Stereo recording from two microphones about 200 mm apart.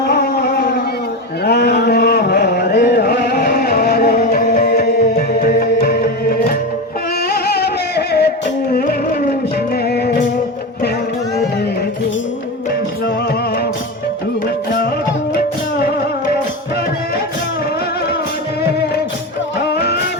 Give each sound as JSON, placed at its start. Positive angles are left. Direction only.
{"t": 0.0, "sound": "a sound", "side_deg": 50}
{"t": 1.5, "sound": "music", "side_deg": 55}
{"t": 9.8, "sound": "music", "side_deg": 55}
{"t": 15.4, "sound": "music", "side_deg": 50}
{"t": 19.5, "sound": "music", "side_deg": 55}